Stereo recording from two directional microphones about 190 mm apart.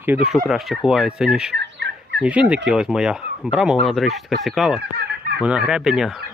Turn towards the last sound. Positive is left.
turn(degrees=0)  # may be behind; listen again after turning